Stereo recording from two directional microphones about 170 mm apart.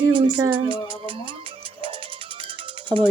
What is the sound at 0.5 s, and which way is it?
Music, 30° right (ahead or behind).